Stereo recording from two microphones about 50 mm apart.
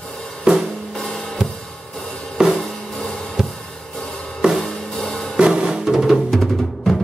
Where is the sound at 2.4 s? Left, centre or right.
Centre.